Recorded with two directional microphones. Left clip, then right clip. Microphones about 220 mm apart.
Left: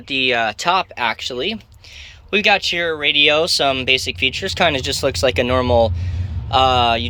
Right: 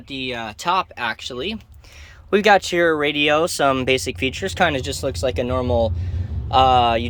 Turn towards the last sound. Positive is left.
turn(degrees=-10)  # may be behind; listen again after turning